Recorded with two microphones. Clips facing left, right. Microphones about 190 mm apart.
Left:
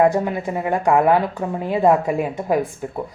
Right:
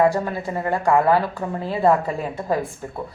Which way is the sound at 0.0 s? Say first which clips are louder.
Left 2 dB; 20° left (ahead or behind).